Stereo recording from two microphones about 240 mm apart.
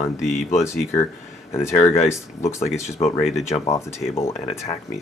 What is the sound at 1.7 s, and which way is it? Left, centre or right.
Speech, left.